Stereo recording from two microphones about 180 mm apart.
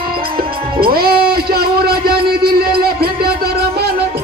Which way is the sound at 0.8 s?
55° right (ahead or behind).